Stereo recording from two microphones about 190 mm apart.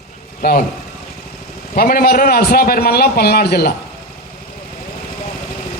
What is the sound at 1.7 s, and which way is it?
A man's voice, 50° left (ahead or behind).